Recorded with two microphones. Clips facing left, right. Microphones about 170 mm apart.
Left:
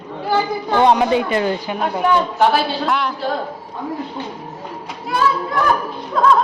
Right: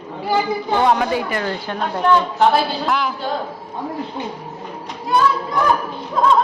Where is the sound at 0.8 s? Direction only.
20° left (ahead or behind); by 3.1 s centre (ahead or behind).